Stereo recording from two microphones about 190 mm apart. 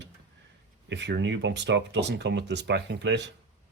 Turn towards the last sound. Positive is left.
turn(degrees=-65)  # may be behind; listen again after turning